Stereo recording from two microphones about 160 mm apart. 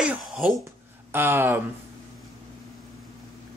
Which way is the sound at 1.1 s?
15° right (ahead or behind).